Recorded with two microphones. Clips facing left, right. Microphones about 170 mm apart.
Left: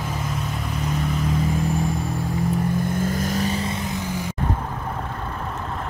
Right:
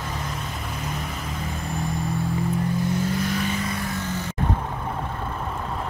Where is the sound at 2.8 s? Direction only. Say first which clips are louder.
Left 1 dB; 50° left (ahead or behind); by 4.4 s 10° left (ahead or behind).